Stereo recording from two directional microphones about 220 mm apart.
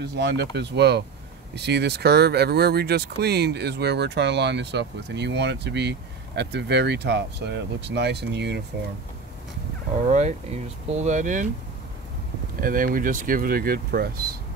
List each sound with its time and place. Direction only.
0.0 s speech: 50° right (ahead or behind)
10.0 s speech: 30° right (ahead or behind)
12.5 s speech: 40° right (ahead or behind)